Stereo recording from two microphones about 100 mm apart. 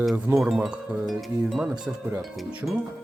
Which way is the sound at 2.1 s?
20° right (ahead or behind).